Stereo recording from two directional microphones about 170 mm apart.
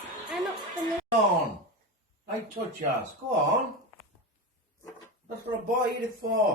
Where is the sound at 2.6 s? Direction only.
40° right (ahead or behind).